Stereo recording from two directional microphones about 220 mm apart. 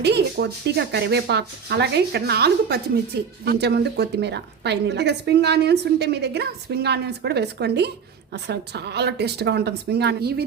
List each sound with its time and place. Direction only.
0.0 s a woman's voice: 50° right (ahead or behind)